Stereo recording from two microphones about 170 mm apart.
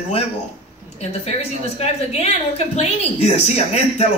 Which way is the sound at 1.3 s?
40° left (ahead or behind).